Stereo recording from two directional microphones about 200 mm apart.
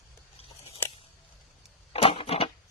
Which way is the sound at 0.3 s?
30° left (ahead or behind).